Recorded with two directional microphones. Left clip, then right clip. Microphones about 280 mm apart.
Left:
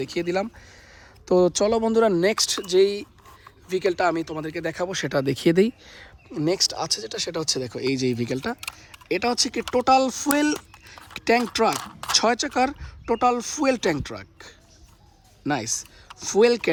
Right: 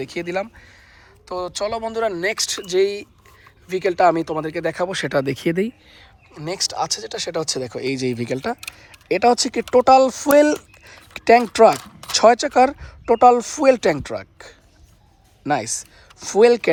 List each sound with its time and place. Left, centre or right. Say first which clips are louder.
0.0 s speech: right 1 dB; centre
1.2 s speech: left 5 dB; left; by 5.5 s centre
5.5 s speech: left 3 dB; centre